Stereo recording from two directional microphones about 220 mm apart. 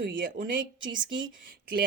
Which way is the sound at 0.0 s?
40° right (ahead or behind).